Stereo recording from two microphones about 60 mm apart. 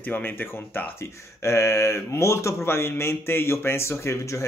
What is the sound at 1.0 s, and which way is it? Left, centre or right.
Speech, left.